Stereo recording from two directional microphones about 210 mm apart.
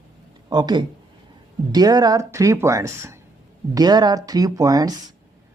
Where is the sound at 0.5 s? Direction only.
20° right (ahead or behind).